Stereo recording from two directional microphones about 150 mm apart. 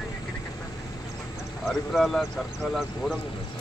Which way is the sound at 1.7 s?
Centre (ahead or behind).